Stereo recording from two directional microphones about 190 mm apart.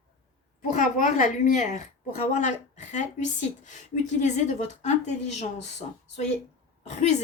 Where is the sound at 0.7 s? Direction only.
40° left (ahead or behind).